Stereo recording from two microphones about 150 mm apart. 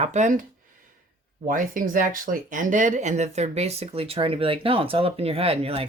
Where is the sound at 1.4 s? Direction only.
65° right (ahead or behind); by 5.9 s 40° right (ahead or behind).